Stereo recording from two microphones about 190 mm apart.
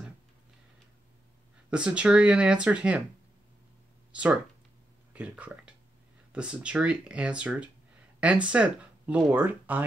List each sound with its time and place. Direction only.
1.7 s speech: 5° right (ahead or behind)
4.1 s speech: 5° right (ahead or behind)